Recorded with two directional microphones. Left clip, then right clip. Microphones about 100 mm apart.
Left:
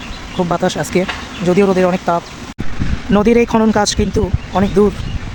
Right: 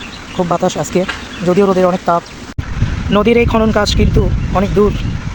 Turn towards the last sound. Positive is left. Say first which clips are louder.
# right 1 dB
turn(degrees=25)  # may be behind; listen again after turning